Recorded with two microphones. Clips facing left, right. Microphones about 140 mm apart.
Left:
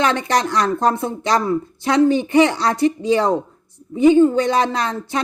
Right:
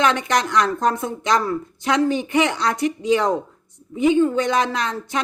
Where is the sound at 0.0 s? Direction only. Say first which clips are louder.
Left 1 dB; 35° left (ahead or behind).